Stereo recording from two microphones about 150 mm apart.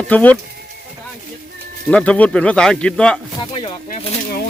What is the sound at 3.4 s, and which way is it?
Speech, 30° left (ahead or behind).